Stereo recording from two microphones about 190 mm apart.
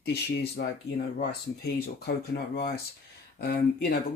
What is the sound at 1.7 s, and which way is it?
Speech, 55° left (ahead or behind).